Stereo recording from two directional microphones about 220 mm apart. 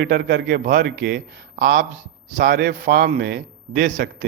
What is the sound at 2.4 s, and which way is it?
A man's voice, 50° right (ahead or behind).